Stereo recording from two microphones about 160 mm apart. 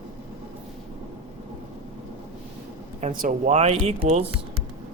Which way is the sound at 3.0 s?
55° right (ahead or behind).